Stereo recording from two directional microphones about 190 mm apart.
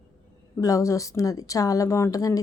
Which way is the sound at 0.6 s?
15° left (ahead or behind).